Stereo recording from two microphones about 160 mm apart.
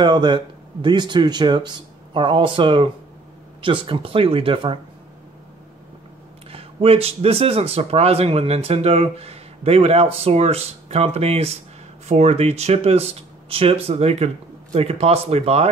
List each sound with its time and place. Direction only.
0.0 s speech: 30° right (ahead or behind)
6.5 s speech: 35° right (ahead or behind)